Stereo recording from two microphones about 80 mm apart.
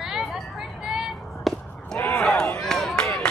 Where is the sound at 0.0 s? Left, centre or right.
Centre.